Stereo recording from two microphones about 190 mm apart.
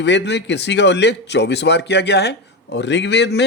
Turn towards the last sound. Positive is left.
turn(degrees=65)  # may be behind; listen again after turning